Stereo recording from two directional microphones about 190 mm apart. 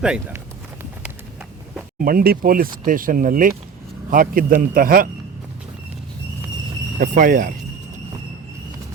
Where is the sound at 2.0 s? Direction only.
50° right (ahead or behind).